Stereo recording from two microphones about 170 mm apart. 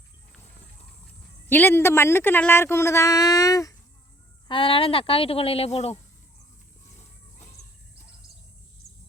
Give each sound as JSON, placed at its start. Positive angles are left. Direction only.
{"t": 1.5, "sound": "speech", "side_deg": 10}
{"t": 4.4, "sound": "speech", "side_deg": 30}
{"t": 8.8, "sound": "bird", "side_deg": 40}